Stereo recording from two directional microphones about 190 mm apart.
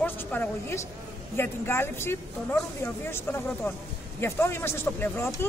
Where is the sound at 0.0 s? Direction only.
10° left (ahead or behind).